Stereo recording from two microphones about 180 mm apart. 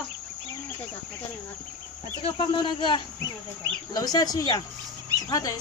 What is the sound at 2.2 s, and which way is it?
Speech, 30° left (ahead or behind).